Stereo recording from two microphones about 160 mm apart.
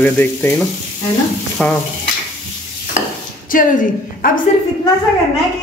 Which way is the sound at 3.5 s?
60° left (ahead or behind).